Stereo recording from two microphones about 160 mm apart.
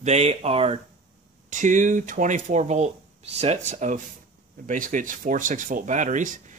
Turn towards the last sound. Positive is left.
turn(degrees=-55)  # may be behind; listen again after turning